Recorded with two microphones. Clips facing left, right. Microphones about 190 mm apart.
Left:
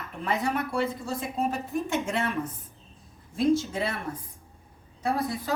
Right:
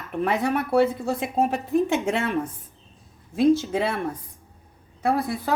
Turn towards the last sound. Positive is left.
turn(degrees=-60)  # may be behind; listen again after turning